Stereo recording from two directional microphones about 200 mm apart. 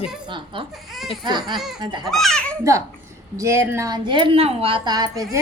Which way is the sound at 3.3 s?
15° right (ahead or behind).